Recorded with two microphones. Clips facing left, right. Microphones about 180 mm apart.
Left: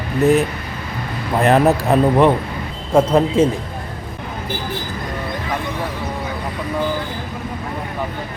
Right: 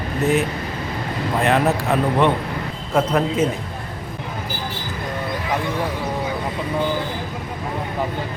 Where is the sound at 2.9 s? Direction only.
30° left (ahead or behind).